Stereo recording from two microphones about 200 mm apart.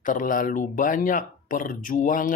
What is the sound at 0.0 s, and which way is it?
Speech, 40° left (ahead or behind).